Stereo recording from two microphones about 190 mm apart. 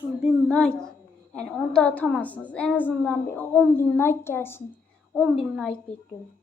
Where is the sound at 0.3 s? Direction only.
Centre (ahead or behind).